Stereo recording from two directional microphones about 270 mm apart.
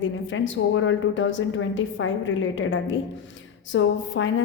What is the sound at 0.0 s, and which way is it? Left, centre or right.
A woman's voice, left.